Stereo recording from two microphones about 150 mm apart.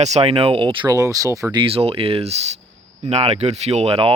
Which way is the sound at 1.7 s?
40° right (ahead or behind).